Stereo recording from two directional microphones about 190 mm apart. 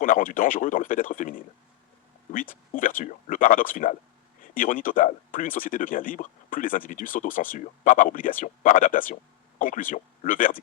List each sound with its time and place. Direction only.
0.0 s speech: 45° left (ahead or behind)